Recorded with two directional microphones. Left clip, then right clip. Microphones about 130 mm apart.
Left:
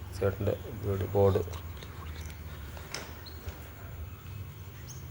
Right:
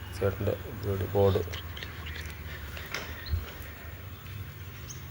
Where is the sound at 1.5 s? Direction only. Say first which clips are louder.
Right 6 dB; 25° left (ahead or behind).